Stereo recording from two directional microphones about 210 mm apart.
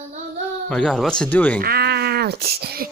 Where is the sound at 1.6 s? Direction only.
50° right (ahead or behind).